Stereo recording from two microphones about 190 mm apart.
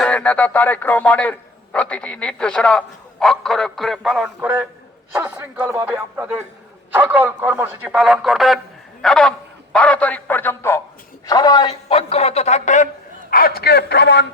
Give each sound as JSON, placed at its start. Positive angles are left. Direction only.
{"t": 0.0, "sound": "a man's voice", "side_deg": 5}
{"t": 6.9, "sound": "a man's voice", "side_deg": -10}
{"t": 11.7, "sound": "speech", "side_deg": 30}
{"t": 13.3, "sound": "a man's voice", "side_deg": 55}